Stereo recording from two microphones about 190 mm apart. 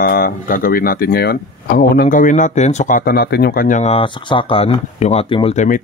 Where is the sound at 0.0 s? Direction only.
50° left (ahead or behind).